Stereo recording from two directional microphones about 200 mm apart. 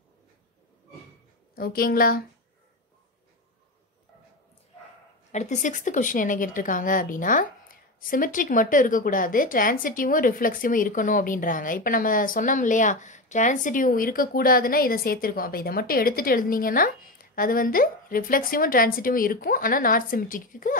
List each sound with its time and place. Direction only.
1.5 s a woman's voice: 45° left (ahead or behind)
5.3 s a woman's voice: 35° left (ahead or behind)